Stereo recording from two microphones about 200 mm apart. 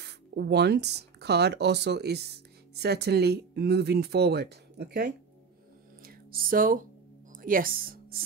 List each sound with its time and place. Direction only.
0.0 s speech: 60° right (ahead or behind)
6.0 s music: 45° right (ahead or behind)
7.3 s speech: 45° right (ahead or behind)